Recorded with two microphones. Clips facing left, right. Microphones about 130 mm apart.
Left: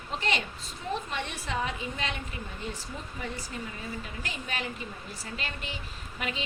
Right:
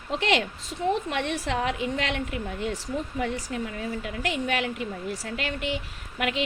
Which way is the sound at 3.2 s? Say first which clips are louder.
Right 5 dB; 70° right (ahead or behind).